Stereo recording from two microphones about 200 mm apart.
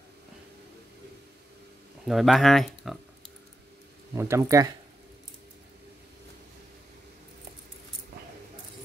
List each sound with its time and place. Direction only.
2.0 s speech: centre (ahead or behind)
4.2 s speech: 15° right (ahead or behind)